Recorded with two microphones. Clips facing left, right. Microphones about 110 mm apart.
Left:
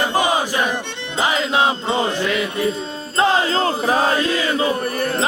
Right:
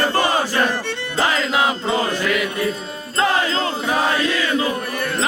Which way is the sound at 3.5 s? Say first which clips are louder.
Left 3 dB; 35° left (ahead or behind).